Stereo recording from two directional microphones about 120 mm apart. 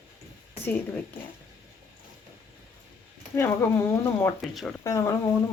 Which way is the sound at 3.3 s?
20° left (ahead or behind).